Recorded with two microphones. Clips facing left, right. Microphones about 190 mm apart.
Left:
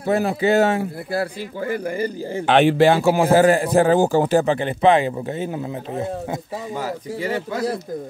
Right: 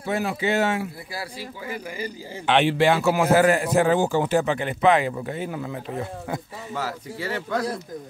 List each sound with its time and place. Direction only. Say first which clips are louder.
0.0 s speech: left 6 dB; 40° left (ahead or behind)
1.1 s speech: left 10 dB; 55° left (ahead or behind); by 7.4 s 15° left (ahead or behind)